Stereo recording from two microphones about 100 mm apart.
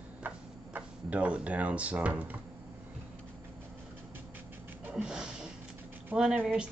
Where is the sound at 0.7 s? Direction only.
15° right (ahead or behind).